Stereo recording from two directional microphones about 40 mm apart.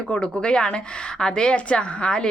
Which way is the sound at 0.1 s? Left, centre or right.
Left.